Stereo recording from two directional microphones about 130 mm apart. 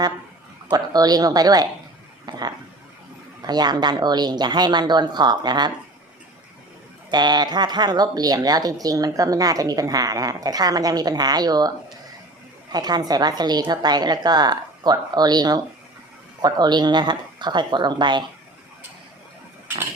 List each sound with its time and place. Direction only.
0.7 s a woman's voice: 30° right (ahead or behind)
2.3 s dog: 30° right (ahead or behind)
3.4 s a woman's voice: 30° right (ahead or behind)
7.1 s speech: 35° right (ahead or behind)
12.7 s a woman's voice: 30° right (ahead or behind)